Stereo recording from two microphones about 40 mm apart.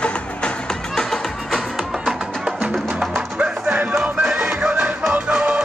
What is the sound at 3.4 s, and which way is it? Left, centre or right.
Music, right.